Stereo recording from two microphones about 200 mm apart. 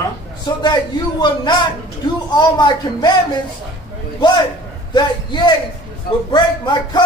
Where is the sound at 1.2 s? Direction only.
20° left (ahead or behind).